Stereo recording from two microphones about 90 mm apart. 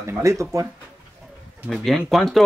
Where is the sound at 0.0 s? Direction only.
35° right (ahead or behind).